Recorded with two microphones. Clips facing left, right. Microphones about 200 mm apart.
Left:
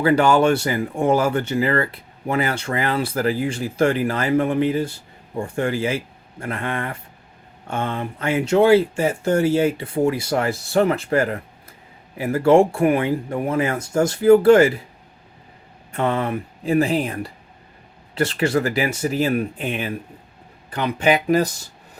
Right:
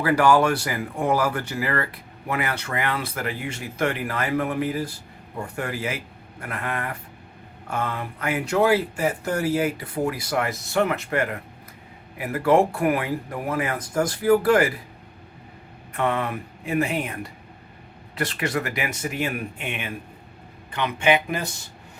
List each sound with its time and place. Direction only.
0.0 s speech: 25° left (ahead or behind)
15.9 s speech: 30° left (ahead or behind)